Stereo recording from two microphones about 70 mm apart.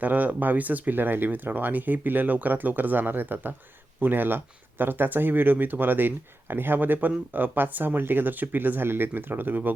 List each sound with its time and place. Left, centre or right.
0.0 s speech: right